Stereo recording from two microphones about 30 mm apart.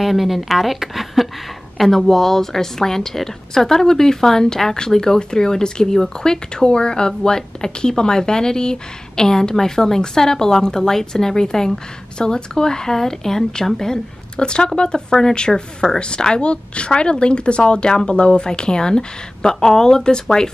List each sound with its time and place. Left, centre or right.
0.0 s a woman's voice: centre
14.3 s a woman's voice: left